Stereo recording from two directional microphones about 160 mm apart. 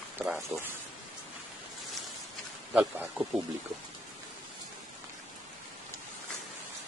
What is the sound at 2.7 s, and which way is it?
Speech, 10° right (ahead or behind).